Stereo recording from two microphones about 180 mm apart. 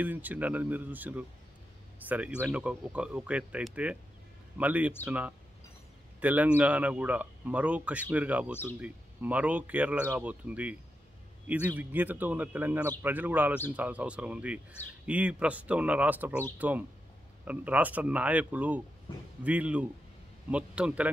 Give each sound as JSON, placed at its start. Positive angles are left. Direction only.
{"t": 0.0, "sound": "a man's voice", "side_deg": -10}